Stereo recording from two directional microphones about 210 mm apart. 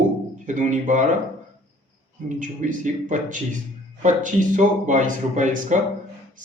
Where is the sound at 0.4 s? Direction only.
35° right (ahead or behind).